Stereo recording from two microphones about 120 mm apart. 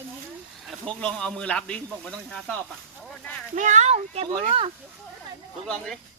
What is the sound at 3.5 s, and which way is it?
Speech, 90° right.